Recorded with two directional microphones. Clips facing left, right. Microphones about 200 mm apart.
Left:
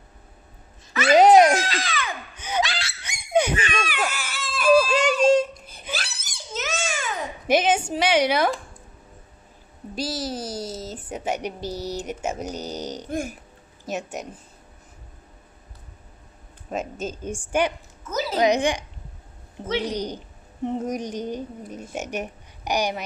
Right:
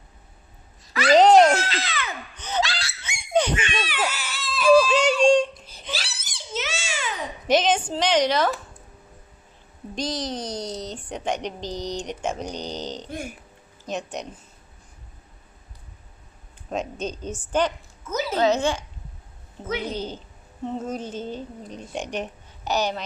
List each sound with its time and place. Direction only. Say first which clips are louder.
1.1 s music: even; 10° left (ahead or behind)
2.3 s laughter: even; 10° left (ahead or behind)
3.5 s baby cry: left 1 dB; 45° left (ahead or behind)
4.7 s a sound: right 1 dB; centre (ahead or behind)
5.9 s crying: left 1 dB; 45° left (ahead or behind)
7.4 s a woman's voice: even; 10° left (ahead or behind)
9.9 s a woman's voice: even; 5° left (ahead or behind)
13.1 s speech: left 5 dB; 45° left (ahead or behind)
13.8 s a woman's voice: even; 5° left (ahead or behind)
16.7 s a woman's voice: right 1 dB; 5° left (ahead or behind)
19.9 s a woman's voice: left 2 dB; 15° left (ahead or behind)